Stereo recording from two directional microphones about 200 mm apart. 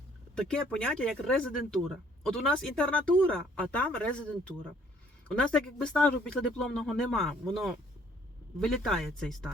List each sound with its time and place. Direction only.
0.3 s speech: 5° left (ahead or behind)